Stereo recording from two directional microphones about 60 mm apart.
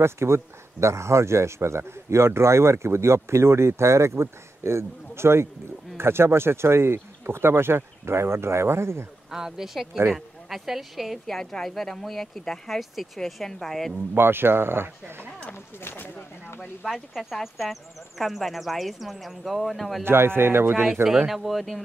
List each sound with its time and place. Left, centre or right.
0.0 s speech: right
9.3 s speech: centre
14.1 s speech: right
15.5 s speech: left
16.8 s speech: centre
20.1 s speech: right
20.8 s speech: centre
21.3 s speech: centre